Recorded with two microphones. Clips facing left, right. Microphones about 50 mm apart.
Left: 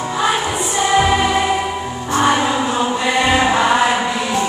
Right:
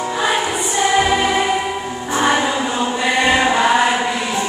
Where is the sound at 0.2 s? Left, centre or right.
Centre.